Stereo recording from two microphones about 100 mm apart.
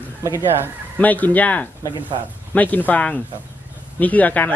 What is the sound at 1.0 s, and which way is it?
Speech, 15° left (ahead or behind).